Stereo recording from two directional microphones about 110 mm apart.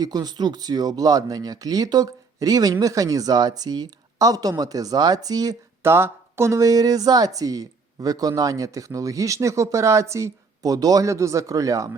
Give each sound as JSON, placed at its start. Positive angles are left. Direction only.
{"t": 0.0, "sound": "a woman's voice", "side_deg": -40}
{"t": 5.8, "sound": "a woman's voice", "side_deg": -20}